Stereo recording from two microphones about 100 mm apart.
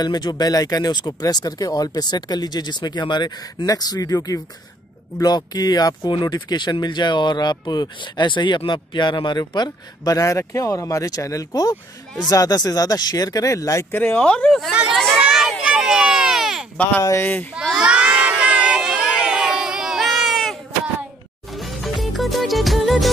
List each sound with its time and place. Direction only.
0.0 s speech: 45° left (ahead or behind)
13.9 s speech: 15° left (ahead or behind)
14.7 s speech: 10° right (ahead or behind)
15.0 s a sound: 5° left (ahead or behind)
17.2 s a child's voice: 20° left (ahead or behind)
17.7 s crowd: 10° right (ahead or behind)
21.5 s music: centre (ahead or behind)